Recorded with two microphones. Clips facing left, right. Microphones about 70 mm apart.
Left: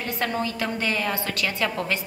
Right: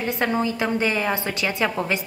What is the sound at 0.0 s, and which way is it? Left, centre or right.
A woman's voice, right.